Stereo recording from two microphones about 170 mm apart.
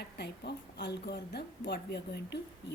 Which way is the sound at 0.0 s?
75° left (ahead or behind).